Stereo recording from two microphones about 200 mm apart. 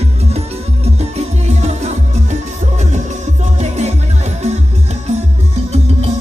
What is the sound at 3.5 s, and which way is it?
Music, 35° right (ahead or behind).